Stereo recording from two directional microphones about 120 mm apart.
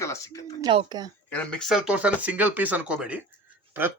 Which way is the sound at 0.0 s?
25° left (ahead or behind).